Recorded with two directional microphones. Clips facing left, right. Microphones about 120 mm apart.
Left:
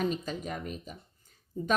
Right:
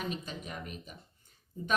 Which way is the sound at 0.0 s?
40° left (ahead or behind).